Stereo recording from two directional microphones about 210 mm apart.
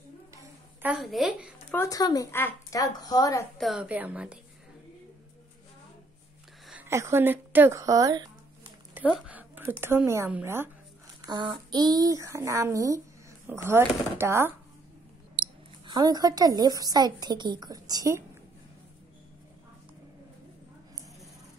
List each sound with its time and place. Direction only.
0.3 s a sound: 15° right (ahead or behind)
0.9 s a woman's voice: centre (ahead or behind)
1.7 s speech: 15° left (ahead or behind)
3.5 s a woman's voice: centre (ahead or behind)
6.7 s a woman's voice: 10° right (ahead or behind)
15.9 s a woman's voice: 20° right (ahead or behind)